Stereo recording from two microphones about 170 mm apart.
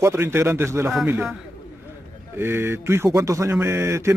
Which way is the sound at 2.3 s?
15° right (ahead or behind).